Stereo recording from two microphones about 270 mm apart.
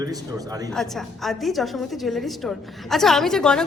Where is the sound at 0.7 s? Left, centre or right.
Centre.